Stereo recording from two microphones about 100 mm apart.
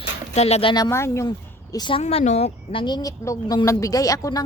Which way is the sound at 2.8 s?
40° left (ahead or behind).